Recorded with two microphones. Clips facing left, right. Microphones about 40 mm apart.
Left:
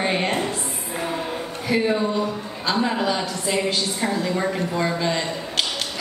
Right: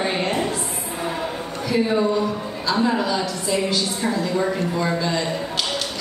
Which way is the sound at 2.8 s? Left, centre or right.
Left.